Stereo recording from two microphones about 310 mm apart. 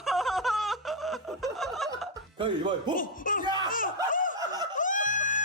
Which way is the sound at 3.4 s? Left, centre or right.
Centre.